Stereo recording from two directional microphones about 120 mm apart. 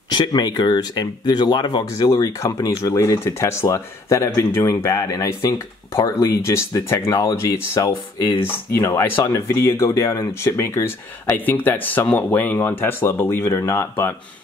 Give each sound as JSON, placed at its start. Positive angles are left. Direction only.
{"t": 0.1, "sound": "speech", "side_deg": 35}